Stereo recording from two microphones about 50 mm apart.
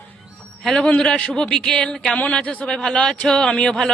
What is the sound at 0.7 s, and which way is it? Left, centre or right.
A man's voice, centre.